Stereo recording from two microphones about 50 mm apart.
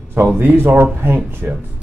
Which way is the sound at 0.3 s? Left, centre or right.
Right.